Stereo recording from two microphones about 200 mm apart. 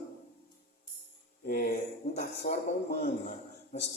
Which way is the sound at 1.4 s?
45° left (ahead or behind).